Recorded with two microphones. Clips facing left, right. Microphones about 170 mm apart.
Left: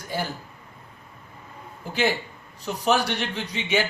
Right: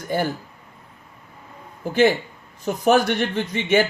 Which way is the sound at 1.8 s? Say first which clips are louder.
Right 7 dB; 50° right (ahead or behind).